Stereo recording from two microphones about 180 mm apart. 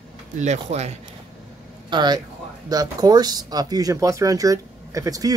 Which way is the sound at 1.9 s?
25° right (ahead or behind).